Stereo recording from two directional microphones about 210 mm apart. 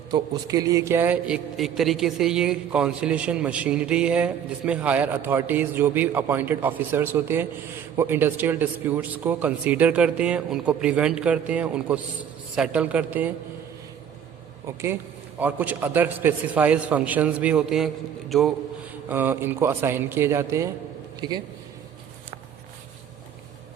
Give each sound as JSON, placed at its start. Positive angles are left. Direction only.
{"t": 0.1, "sound": "a man's voice", "side_deg": -15}
{"t": 15.4, "sound": "a man's voice", "side_deg": -10}